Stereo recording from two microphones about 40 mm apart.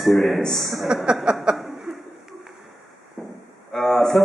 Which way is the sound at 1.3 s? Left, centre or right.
Right.